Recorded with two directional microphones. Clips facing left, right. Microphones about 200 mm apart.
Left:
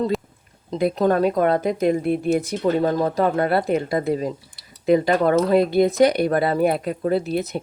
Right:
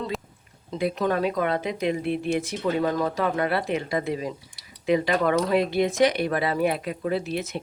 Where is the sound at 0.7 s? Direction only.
40° left (ahead or behind).